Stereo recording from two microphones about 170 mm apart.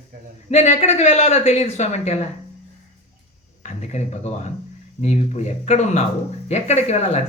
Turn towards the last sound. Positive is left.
turn(degrees=40)  # may be behind; listen again after turning